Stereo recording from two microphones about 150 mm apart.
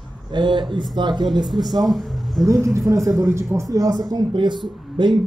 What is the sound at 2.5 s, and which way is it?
Speech, 20° right (ahead or behind).